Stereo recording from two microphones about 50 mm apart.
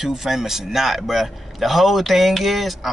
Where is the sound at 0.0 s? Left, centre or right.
Centre.